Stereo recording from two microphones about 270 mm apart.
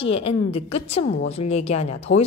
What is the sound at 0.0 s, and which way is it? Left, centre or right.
A woman's voice, left.